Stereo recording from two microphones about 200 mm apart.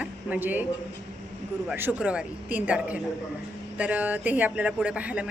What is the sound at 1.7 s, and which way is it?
A woman's voice, 5° right (ahead or behind).